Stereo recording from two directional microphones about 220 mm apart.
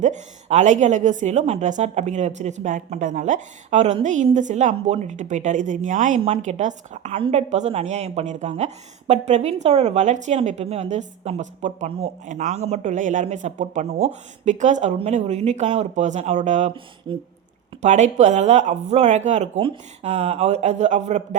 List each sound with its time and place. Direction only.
0.0 s a woman's voice: 30° right (ahead or behind)